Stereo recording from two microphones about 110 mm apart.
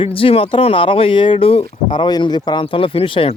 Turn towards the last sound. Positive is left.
turn(degrees=55)  # may be behind; listen again after turning